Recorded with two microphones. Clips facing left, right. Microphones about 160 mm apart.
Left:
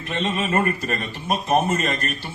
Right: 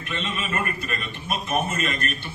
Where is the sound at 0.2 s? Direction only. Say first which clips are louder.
Left 8 dB; 40° left (ahead or behind).